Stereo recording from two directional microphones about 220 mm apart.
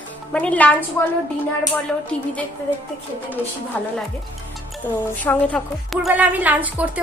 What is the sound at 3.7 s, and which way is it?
Speech, 5° left (ahead or behind).